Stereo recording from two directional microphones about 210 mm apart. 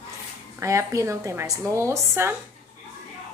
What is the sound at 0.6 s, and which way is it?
A woman's voice, 15° right (ahead or behind).